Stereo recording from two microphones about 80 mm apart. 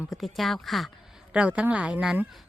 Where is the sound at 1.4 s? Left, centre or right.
Centre.